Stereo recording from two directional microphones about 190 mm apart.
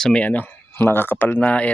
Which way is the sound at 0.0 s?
5° left (ahead or behind).